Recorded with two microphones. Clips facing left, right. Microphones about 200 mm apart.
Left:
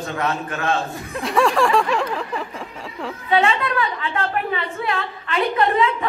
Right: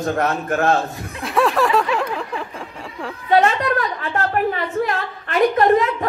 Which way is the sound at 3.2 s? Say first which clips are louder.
Right 3 dB; 45° right (ahead or behind).